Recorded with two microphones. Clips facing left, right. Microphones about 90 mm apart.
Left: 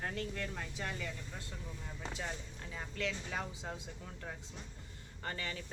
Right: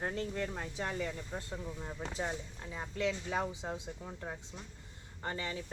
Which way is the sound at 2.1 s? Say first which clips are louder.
Right 6 dB; 25° right (ahead or behind).